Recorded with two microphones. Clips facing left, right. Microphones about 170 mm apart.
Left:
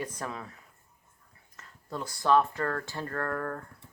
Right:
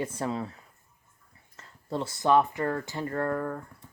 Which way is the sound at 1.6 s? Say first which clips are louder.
Right 5 dB; 30° right (ahead or behind).